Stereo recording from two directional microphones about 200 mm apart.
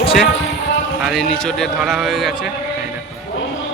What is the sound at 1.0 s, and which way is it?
A man's voice, centre (ahead or behind).